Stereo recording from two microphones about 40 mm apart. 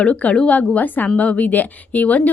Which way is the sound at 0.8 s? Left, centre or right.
Left.